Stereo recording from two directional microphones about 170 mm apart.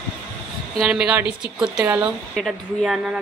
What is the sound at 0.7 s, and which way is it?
A woman's voice, 5° right (ahead or behind).